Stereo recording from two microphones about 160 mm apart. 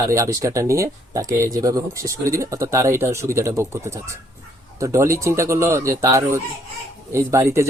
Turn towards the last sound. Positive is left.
turn(degrees=-15)  # may be behind; listen again after turning